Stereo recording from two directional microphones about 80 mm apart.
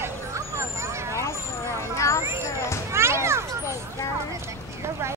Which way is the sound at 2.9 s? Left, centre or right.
Right.